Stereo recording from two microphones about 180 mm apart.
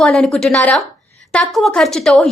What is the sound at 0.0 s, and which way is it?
A woman's voice, centre (ahead or behind).